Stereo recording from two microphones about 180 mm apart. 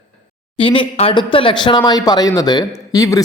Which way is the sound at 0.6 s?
30° left (ahead or behind).